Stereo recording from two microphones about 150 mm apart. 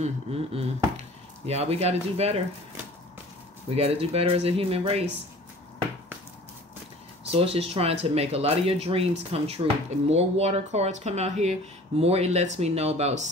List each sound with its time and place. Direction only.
0.0 s speech: 40° right (ahead or behind)
3.7 s speech: 40° right (ahead or behind)
7.2 s speech: 40° right (ahead or behind)